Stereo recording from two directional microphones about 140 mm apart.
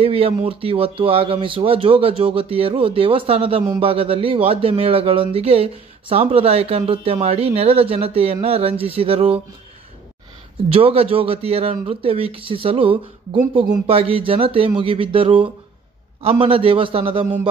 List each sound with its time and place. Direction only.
0.0 s a man's voice: 45° right (ahead or behind)
10.7 s a man's voice: 45° right (ahead or behind)